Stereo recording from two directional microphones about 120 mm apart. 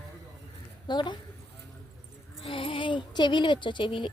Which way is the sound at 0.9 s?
40° left (ahead or behind).